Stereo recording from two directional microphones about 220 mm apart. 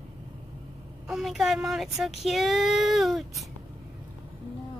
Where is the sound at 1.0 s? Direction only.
Centre (ahead or behind).